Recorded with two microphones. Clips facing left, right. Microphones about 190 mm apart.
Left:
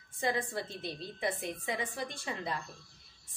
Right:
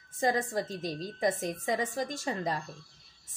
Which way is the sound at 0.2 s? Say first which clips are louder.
Right 5 dB; 40° right (ahead or behind).